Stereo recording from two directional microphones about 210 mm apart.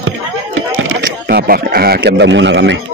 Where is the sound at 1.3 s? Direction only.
45° right (ahead or behind).